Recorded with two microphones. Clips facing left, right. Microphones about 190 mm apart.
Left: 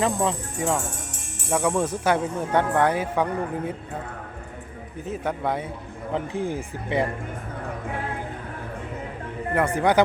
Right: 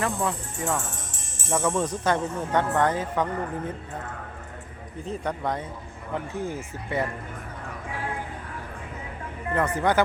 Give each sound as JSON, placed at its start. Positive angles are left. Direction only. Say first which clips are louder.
{"t": 0.0, "sound": "speech", "louder": "left 4 dB", "side_deg": 20}
{"t": 1.5, "sound": "speech", "louder": "left 2 dB", "side_deg": 10}
{"t": 5.0, "sound": "speech", "louder": "left 2 dB", "side_deg": 5}
{"t": 9.6, "sound": "speech", "louder": "left 3 dB", "side_deg": 10}